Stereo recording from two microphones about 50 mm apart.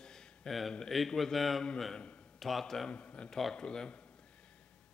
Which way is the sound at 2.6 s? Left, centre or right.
Centre.